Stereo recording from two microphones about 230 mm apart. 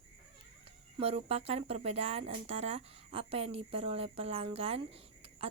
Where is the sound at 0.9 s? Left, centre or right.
Right.